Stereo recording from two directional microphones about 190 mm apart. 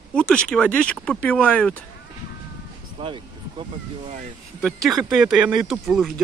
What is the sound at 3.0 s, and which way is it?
Speech, 25° right (ahead or behind).